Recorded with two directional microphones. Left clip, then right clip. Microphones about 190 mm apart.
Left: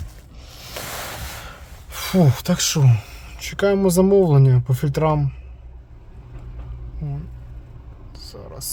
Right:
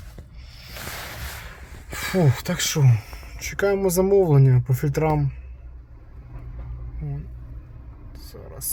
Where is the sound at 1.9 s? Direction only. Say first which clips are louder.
Left 2 dB; 10° left (ahead or behind).